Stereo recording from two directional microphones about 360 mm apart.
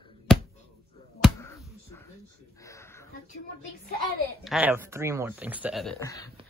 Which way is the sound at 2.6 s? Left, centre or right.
Centre.